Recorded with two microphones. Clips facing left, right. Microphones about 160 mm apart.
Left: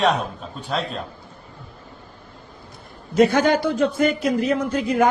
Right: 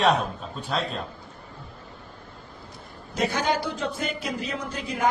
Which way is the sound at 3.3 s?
55° left (ahead or behind).